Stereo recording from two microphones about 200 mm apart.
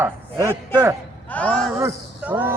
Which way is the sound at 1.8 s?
10° right (ahead or behind).